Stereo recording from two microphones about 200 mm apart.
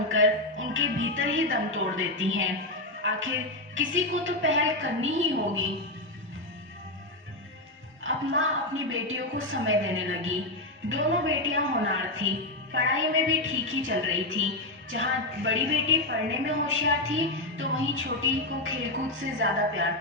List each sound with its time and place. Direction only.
0.1 s music: 80° right
1.7 s a woman's voice: 80° right
3.0 s music: 75° right (ahead or behind)
4.3 s a woman's voice: 70° right (ahead or behind)
8.0 s a woman's voice: 80° right
15.4 s a woman's voice: 75° right (ahead or behind)